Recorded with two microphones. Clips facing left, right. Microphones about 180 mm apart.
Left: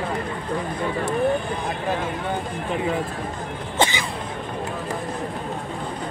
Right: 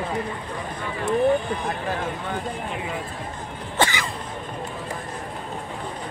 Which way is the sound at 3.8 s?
20° left (ahead or behind).